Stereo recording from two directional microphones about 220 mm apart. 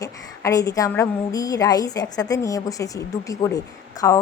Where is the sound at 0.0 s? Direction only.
15° left (ahead or behind).